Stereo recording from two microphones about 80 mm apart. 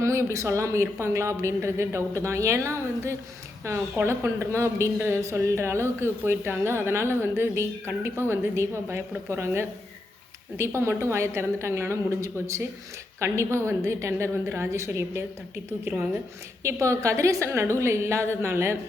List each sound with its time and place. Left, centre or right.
0.0 s a woman's voice: right
4.9 s a woman's voice: right
16.6 s a woman's voice: right